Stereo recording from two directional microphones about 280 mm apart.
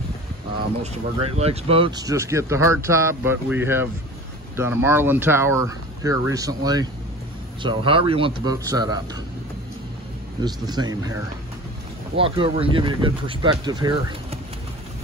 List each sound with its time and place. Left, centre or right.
1.2 s speech: right
10.4 s speech: centre
12.2 s speech: centre